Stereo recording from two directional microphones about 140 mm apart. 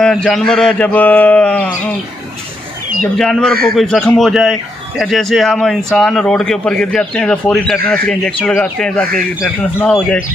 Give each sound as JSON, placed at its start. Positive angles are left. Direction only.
{"t": 0.0, "sound": "a man's voice", "side_deg": 5}
{"t": 3.0, "sound": "a man's voice", "side_deg": 5}